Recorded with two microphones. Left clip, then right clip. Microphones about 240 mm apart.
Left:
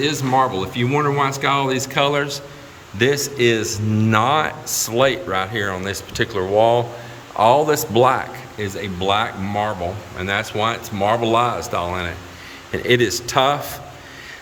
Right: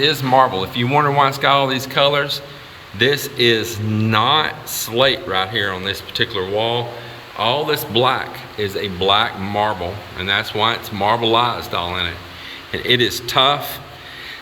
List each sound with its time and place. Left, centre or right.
0.0 s speech: centre